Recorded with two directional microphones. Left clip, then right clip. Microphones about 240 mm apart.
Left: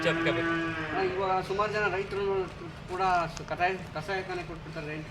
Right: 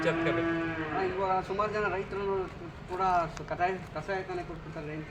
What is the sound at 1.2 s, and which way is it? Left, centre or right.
Speech, centre.